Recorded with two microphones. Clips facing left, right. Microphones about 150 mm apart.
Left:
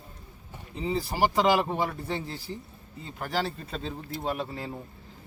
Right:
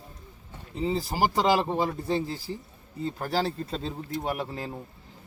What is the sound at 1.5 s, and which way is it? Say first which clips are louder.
Speech: right 1 dB; 30° right (ahead or behind).